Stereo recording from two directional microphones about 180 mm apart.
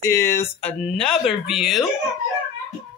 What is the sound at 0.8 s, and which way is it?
Speech, 5° left (ahead or behind).